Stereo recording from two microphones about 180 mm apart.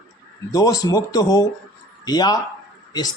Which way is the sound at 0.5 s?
20° left (ahead or behind).